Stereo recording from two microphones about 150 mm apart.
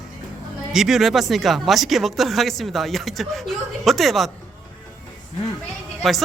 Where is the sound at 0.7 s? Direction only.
Centre (ahead or behind).